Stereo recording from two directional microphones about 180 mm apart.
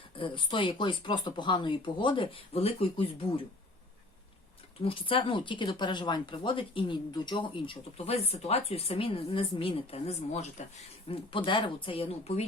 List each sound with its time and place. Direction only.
0.2 s speech: 25° left (ahead or behind)
4.8 s speech: 30° left (ahead or behind)